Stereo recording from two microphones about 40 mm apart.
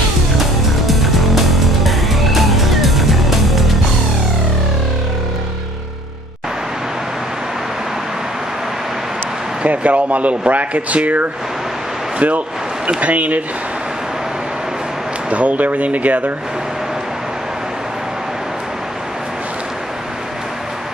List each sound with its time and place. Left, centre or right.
0.4 s music: centre
9.7 s speech: right
12.2 s a sound: right
13.0 s speech: right
15.2 s speech: right